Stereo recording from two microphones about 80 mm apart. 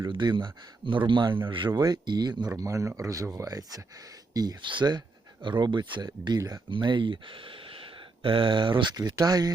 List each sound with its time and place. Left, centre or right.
0.1 s speech: right
1.8 s speech: right
2.5 s speech: right
4.6 s speech: right
6.1 s speech: right
6.7 s speech: right
9.2 s speech: right